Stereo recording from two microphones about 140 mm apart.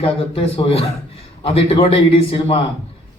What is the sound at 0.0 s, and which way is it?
A man's voice, 45° left (ahead or behind).